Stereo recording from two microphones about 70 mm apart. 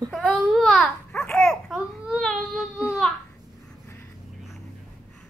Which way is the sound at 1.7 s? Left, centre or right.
Centre.